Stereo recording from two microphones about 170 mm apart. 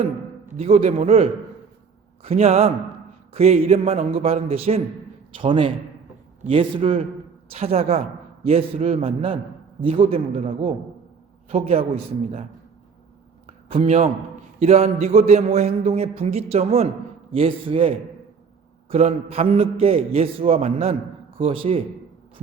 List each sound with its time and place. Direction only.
0.5 s a man's voice: 35° right (ahead or behind)
13.7 s a man's voice: 40° right (ahead or behind)